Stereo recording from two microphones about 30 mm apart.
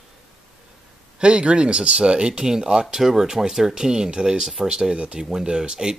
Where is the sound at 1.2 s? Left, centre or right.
Right.